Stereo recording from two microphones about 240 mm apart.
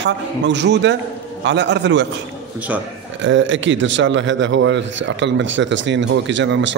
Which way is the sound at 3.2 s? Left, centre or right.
Right.